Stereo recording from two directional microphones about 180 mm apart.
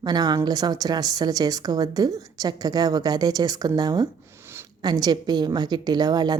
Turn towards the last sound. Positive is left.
turn(degrees=-20)  # may be behind; listen again after turning